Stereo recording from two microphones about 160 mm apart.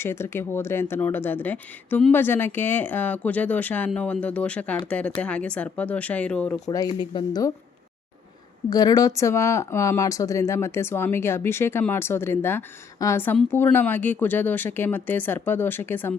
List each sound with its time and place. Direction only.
0.0 s speech: 15° left (ahead or behind)
6.7 s speech: 25° left (ahead or behind)
8.7 s speech: 25° left (ahead or behind)